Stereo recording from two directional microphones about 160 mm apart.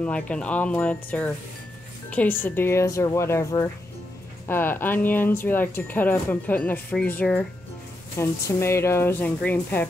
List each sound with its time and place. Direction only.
0.0 s speech: 5° left (ahead or behind)